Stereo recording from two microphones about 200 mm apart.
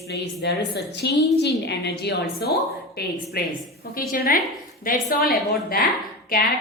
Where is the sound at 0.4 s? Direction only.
55° left (ahead or behind).